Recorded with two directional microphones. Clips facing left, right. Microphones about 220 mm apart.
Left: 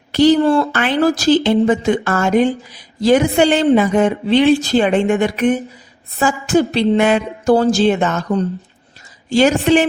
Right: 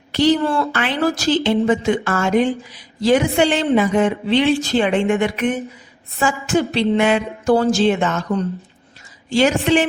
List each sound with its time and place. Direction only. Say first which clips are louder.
0.1 s a woman's voice: left 5 dB; 40° left (ahead or behind)